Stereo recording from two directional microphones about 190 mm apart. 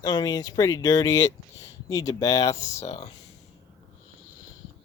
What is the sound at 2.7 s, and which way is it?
Speech, 35° left (ahead or behind).